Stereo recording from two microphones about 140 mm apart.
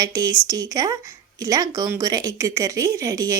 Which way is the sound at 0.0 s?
25° right (ahead or behind).